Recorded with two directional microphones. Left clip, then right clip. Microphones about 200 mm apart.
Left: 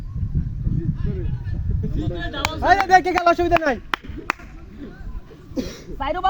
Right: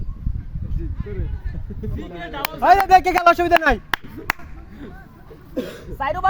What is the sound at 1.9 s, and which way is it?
Speech, 30° right (ahead or behind).